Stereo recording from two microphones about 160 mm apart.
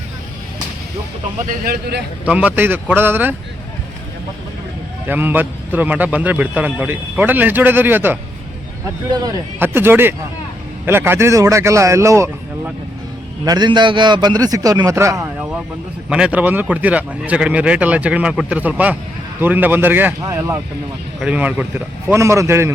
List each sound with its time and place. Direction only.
1.6 s a man's voice: 80° right
2.2 s a man's voice: 10° right (ahead or behind)
5.0 s a man's voice: 10° right (ahead or behind)
9.0 s a man's voice: 25° right (ahead or behind)
9.6 s a man's voice: 15° right (ahead or behind)